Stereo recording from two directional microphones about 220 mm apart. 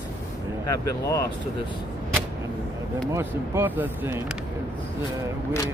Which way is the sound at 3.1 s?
10° right (ahead or behind).